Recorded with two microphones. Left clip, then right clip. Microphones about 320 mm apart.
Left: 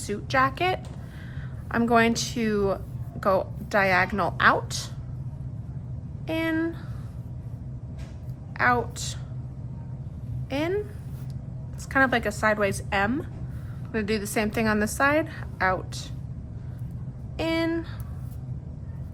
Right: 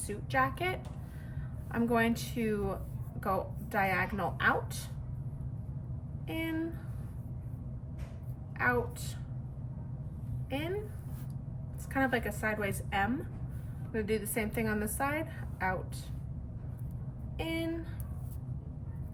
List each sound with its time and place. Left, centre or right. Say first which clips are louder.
0.1 s a woman's voice: left 8 dB; centre
6.2 s a woman's voice: left 10 dB; centre
8.5 s a woman's voice: left 8 dB; centre
11.9 s a woman's voice: left 9 dB; centre
17.3 s speech: left 10 dB; centre